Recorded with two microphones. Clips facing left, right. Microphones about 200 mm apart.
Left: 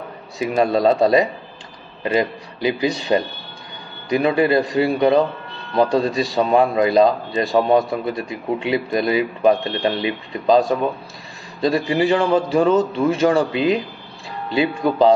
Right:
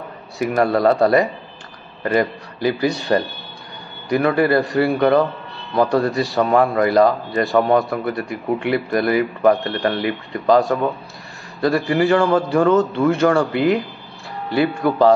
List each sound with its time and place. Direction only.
0.4 s a man's voice: 15° left (ahead or behind)